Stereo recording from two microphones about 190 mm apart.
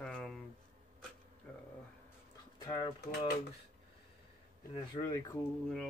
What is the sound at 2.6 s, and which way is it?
Speech, 20° left (ahead or behind).